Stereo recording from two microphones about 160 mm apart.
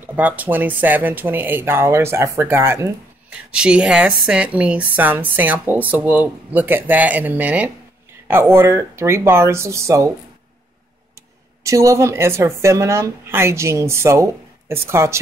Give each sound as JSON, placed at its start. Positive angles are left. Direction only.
{"t": 0.0, "sound": "speech", "side_deg": -10}
{"t": 11.6, "sound": "speech", "side_deg": -20}